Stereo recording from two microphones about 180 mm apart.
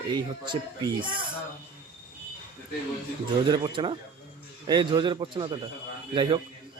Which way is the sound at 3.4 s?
25° right (ahead or behind).